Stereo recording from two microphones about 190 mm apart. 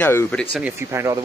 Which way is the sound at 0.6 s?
10° right (ahead or behind).